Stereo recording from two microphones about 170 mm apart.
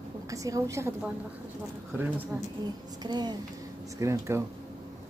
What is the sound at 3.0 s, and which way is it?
A woman's voice, 25° right (ahead or behind).